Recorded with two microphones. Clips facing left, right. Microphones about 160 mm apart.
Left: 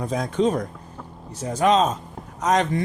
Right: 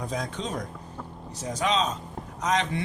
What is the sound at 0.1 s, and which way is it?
A man's voice, 55° left (ahead or behind).